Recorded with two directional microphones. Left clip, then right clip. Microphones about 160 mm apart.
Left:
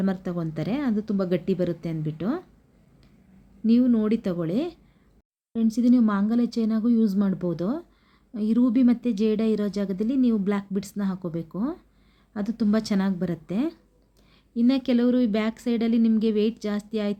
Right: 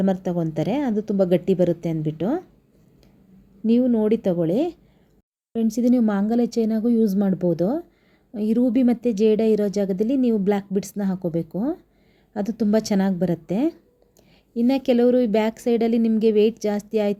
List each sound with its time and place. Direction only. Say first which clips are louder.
0.0 s speech: right 6 dB; 25° right (ahead or behind)
3.7 s speech: right 3 dB; 20° right (ahead or behind)